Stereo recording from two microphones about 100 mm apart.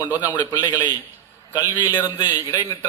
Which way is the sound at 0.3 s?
45° left (ahead or behind).